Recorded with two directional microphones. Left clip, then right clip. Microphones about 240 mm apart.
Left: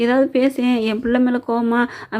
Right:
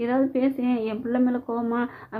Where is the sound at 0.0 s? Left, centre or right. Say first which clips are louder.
Left 7 dB; left.